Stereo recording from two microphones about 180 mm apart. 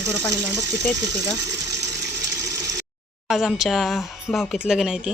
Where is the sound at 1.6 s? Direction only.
70° right (ahead or behind).